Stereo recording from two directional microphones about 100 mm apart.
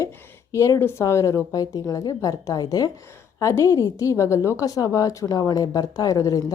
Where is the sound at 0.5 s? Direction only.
30° left (ahead or behind).